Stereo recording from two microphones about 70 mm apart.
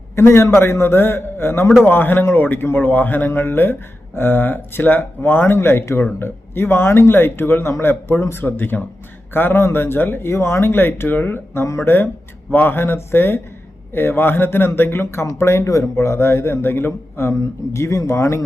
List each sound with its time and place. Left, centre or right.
0.2 s a man's voice: left
17.7 s speech: left